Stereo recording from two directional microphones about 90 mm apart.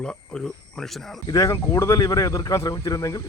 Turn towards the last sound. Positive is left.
turn(degrees=40)  # may be behind; listen again after turning